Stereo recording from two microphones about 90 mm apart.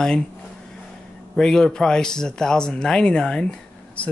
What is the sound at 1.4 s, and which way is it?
Speech, 5° left (ahead or behind).